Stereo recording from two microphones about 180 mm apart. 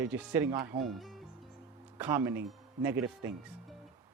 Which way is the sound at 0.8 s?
Centre (ahead or behind).